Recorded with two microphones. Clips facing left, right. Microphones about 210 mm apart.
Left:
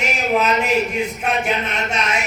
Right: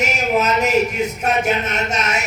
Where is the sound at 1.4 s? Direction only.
40° right (ahead or behind).